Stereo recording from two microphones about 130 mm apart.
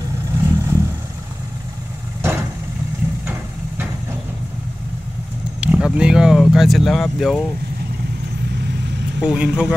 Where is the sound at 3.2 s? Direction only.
15° right (ahead or behind).